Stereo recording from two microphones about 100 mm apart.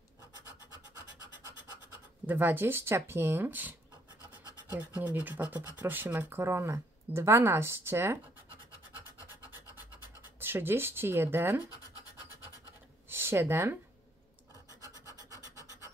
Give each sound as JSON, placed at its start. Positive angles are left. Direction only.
{"t": 2.2, "sound": "speech", "side_deg": -20}
{"t": 10.4, "sound": "speech", "side_deg": -20}
{"t": 13.1, "sound": "speech", "side_deg": -25}
{"t": 14.7, "sound": "filing", "side_deg": 35}